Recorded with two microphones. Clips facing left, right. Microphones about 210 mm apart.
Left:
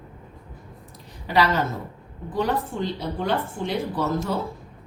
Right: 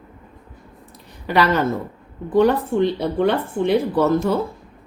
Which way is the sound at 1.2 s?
60° right (ahead or behind).